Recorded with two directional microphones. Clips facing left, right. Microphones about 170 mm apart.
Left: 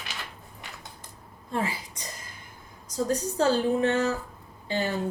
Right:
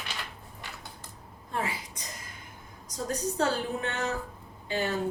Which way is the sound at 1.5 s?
35° left (ahead or behind).